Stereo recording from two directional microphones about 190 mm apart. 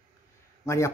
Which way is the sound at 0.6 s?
15° left (ahead or behind).